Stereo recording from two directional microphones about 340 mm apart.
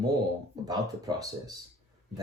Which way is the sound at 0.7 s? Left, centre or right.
Centre.